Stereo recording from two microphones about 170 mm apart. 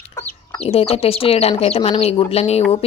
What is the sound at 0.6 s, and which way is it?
Speech, 35° left (ahead or behind).